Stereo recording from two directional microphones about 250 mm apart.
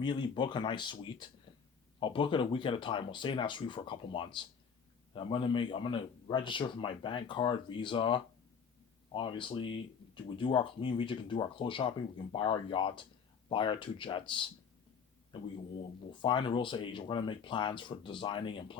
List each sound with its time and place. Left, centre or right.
0.0 s a man's voice: centre